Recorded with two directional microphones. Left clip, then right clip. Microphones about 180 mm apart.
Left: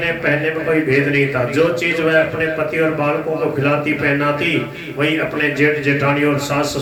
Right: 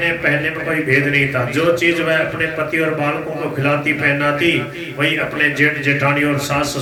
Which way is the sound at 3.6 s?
30° right (ahead or behind).